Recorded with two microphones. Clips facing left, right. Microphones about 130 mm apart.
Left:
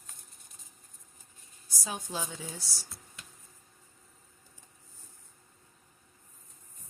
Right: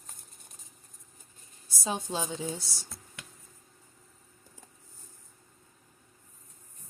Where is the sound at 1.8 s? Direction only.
25° right (ahead or behind).